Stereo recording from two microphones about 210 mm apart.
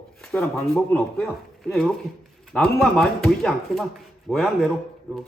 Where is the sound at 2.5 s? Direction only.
Centre (ahead or behind).